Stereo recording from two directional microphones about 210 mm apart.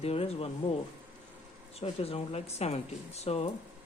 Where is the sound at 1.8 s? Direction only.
30° left (ahead or behind).